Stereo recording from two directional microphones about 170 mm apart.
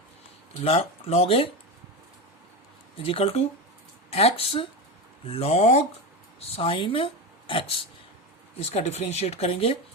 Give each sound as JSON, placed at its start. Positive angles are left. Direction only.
{"t": 0.6, "sound": "speech", "side_deg": 35}
{"t": 3.0, "sound": "speech", "side_deg": 35}